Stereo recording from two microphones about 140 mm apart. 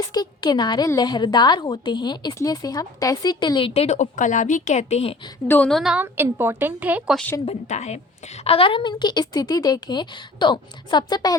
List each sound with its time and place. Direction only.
0.0 s a woman's voice: 25° left (ahead or behind)
3.8 s speech: 55° left (ahead or behind)
5.5 s a woman's voice: 10° left (ahead or behind); by 7.2 s 10° right (ahead or behind)
7.4 s a woman's voice: 55° left (ahead or behind); by 11.3 s 30° left (ahead or behind)